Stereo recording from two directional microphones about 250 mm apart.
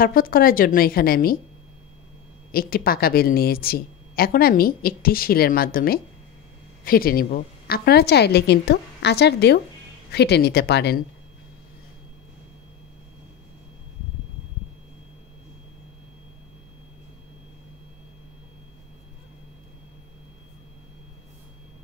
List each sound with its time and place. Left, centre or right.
0.0 s a woman's voice: left
2.5 s a woman's voice: left